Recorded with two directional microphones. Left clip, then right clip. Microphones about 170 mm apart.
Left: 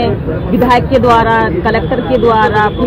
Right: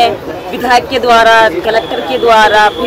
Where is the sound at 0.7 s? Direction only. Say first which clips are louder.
Right 1 dB; 30° right (ahead or behind).